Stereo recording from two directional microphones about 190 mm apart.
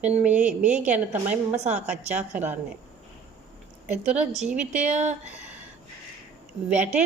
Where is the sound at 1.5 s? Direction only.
35° right (ahead or behind).